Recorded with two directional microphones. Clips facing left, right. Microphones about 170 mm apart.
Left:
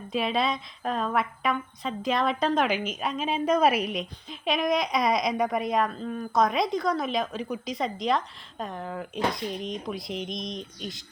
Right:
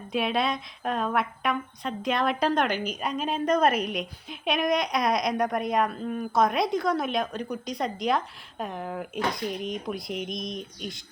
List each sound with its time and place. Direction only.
0.1 s speech: centre (ahead or behind)